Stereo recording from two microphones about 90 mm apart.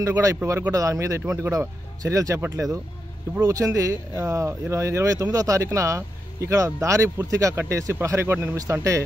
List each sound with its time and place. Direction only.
0.0 s speech: 40° right (ahead or behind)